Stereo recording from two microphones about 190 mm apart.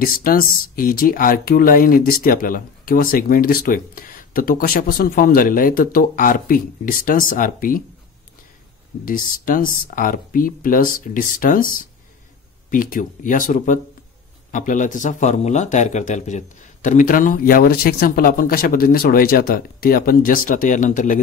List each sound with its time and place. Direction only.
0.0 s speech: 50° left (ahead or behind)
9.0 s speech: 45° left (ahead or behind)